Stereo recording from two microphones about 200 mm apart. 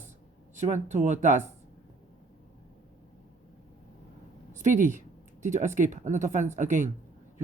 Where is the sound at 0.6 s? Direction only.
35° right (ahead or behind).